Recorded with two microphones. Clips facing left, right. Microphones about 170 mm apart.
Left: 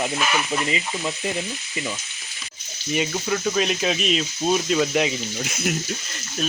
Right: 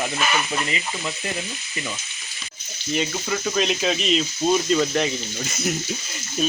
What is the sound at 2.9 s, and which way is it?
Speech, centre (ahead or behind).